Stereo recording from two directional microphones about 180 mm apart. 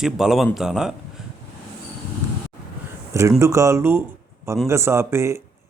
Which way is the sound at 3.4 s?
15° right (ahead or behind).